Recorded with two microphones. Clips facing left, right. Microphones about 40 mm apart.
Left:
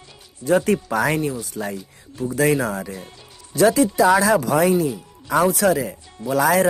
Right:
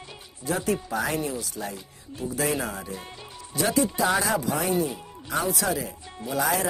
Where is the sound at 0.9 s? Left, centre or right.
Left.